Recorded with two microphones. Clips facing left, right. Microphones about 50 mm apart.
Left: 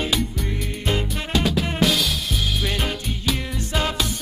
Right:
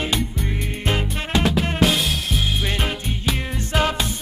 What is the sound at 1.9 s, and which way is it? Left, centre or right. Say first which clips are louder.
Music: right 1 dB; right.